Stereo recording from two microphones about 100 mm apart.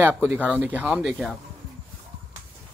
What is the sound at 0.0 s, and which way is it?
Speech, 20° right (ahead or behind).